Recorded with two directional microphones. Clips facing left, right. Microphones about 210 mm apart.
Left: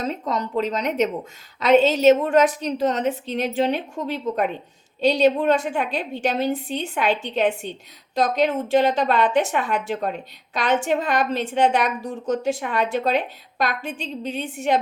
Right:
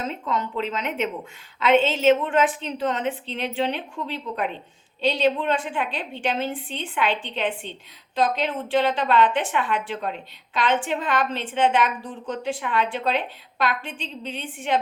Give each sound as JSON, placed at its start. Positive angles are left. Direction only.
{"t": 0.0, "sound": "a woman's voice", "side_deg": 40}